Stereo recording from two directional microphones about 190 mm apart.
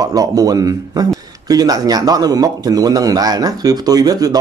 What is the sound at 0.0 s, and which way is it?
A man's voice, 20° right (ahead or behind).